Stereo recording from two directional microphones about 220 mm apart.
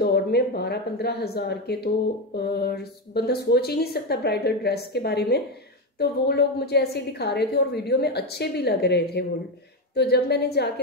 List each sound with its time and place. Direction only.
0.0 s a woman's voice: 45° left (ahead or behind)